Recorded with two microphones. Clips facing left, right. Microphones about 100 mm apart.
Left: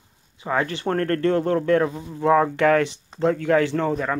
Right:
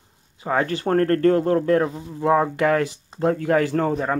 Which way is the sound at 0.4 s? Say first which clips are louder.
Right 2 dB; 35° right (ahead or behind).